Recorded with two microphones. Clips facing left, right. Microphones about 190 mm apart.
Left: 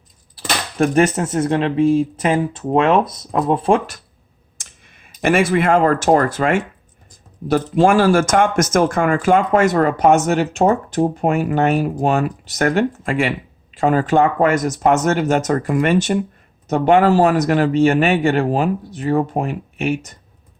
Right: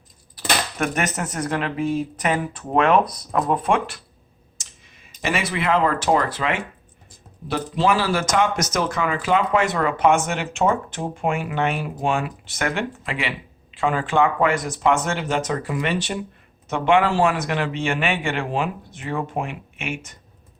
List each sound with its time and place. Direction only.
0.3 s speech: 30° left (ahead or behind)
4.5 s speech: 55° left (ahead or behind); by 20.1 s 40° left (ahead or behind)